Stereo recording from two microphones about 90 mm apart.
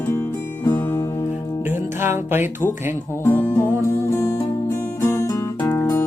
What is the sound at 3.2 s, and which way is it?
Music, 25° left (ahead or behind).